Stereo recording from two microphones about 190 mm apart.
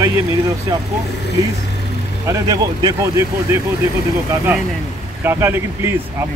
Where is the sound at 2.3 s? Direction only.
20° right (ahead or behind).